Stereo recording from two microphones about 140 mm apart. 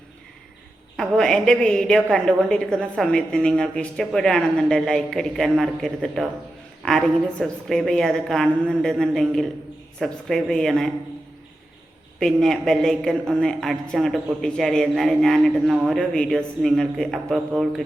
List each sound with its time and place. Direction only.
0.9 s a man's voice: 5° left (ahead or behind)
12.2 s a man's voice: centre (ahead or behind)